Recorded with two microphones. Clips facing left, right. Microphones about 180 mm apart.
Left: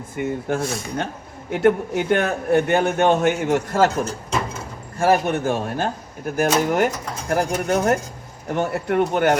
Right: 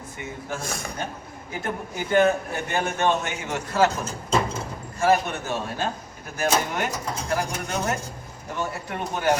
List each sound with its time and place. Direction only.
0.2 s a man's voice: 60° left (ahead or behind)
0.6 s a man's voice: 50° right (ahead or behind)
1.5 s a man's voice: 70° left (ahead or behind)